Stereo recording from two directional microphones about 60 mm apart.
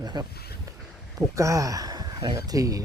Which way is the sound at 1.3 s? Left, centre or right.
Right.